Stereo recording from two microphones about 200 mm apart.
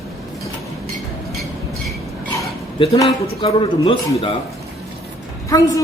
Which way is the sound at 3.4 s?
30° left (ahead or behind).